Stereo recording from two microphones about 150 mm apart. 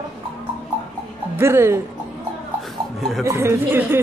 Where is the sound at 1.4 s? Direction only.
15° right (ahead or behind).